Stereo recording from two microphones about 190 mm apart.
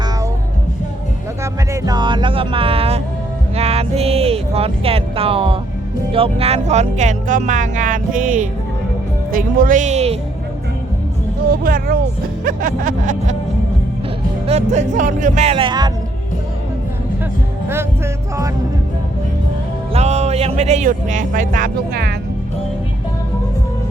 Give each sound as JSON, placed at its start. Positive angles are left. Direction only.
{"t": 1.7, "sound": "music", "side_deg": -20}
{"t": 3.5, "sound": "speech", "side_deg": -30}
{"t": 9.3, "sound": "speech", "side_deg": -45}
{"t": 11.6, "sound": "music", "side_deg": -50}
{"t": 14.4, "sound": "speech", "side_deg": -35}
{"t": 17.7, "sound": "music", "side_deg": -15}
{"t": 19.9, "sound": "speech", "side_deg": -35}